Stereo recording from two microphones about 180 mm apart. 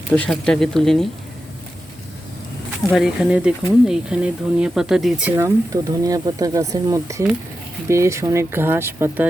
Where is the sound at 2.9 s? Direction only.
Centre (ahead or behind).